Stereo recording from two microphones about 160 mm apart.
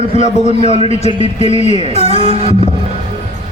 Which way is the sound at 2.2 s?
35° right (ahead or behind).